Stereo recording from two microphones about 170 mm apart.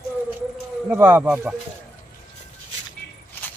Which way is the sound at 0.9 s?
10° right (ahead or behind).